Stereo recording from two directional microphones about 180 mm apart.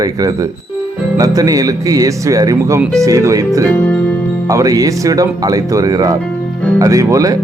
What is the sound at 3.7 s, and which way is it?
Music, 10° left (ahead or behind).